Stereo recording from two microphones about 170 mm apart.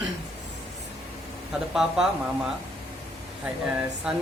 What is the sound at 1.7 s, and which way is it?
Speech, centre (ahead or behind).